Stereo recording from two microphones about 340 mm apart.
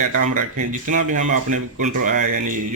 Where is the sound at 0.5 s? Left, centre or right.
Right.